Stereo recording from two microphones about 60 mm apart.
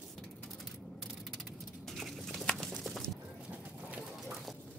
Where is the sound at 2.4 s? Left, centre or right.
Centre.